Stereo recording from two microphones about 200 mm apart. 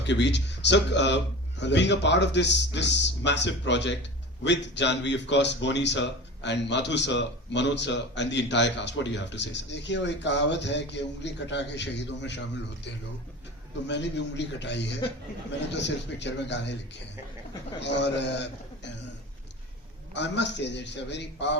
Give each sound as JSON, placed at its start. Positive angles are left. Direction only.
{"t": 0.1, "sound": "a man's voice", "side_deg": 60}
{"t": 13.8, "sound": "a man's voice", "side_deg": 60}
{"t": 17.7, "sound": "a man's voice", "side_deg": 60}
{"t": 20.1, "sound": "a man's voice", "side_deg": 60}